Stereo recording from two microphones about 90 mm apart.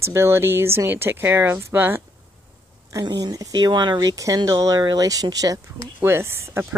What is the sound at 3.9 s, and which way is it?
Speech, 40° right (ahead or behind).